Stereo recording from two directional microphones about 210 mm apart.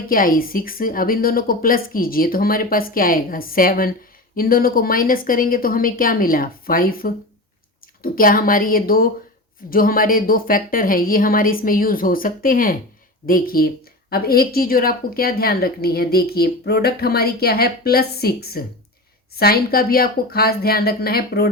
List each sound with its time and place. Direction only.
0.1 s a woman's voice: 40° left (ahead or behind)